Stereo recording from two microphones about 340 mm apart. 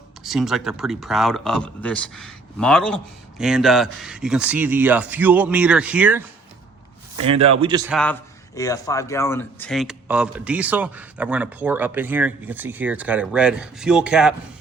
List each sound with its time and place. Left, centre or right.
0.2 s a man's voice: centre
7.6 s a man's voice: centre
7.9 s a man's voice: centre